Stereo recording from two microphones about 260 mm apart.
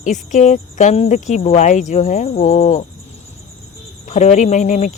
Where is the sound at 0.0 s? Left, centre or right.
Left.